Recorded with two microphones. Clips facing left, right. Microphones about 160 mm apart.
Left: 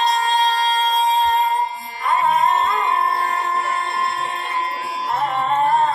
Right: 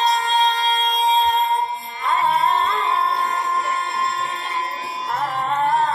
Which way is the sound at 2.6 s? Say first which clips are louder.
Left 1 dB; 50° left (ahead or behind).